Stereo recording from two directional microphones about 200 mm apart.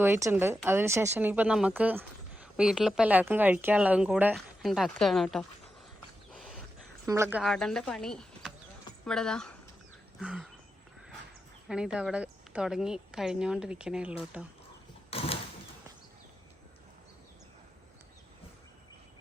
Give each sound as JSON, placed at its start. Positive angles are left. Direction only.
{"t": 0.0, "sound": "speech", "side_deg": -10}
{"t": 6.3, "sound": "wild animals", "side_deg": 0}
{"t": 7.0, "sound": "a woman's voice", "side_deg": -10}
{"t": 10.2, "sound": "a sound", "side_deg": -5}
{"t": 11.7, "sound": "a woman's voice", "side_deg": -5}
{"t": 15.1, "sound": "a sound", "side_deg": 30}